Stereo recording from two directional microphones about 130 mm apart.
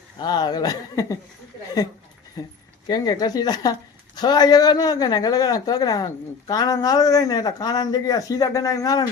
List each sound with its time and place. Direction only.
0.2 s speech: 35° left (ahead or behind)
2.4 s speech: 25° left (ahead or behind)